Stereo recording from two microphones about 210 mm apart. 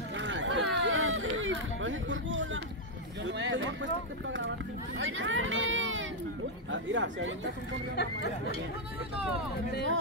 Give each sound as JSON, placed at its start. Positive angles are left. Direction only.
{"t": 0.2, "sound": "run", "side_deg": -60}
{"t": 3.3, "sound": "speech", "side_deg": -60}
{"t": 4.9, "sound": "a sound", "side_deg": -65}
{"t": 6.7, "sound": "speech", "side_deg": -60}
{"t": 7.9, "sound": "speech", "side_deg": 50}